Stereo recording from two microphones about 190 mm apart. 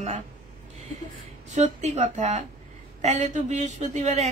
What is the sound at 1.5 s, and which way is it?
A woman's voice, 35° right (ahead or behind).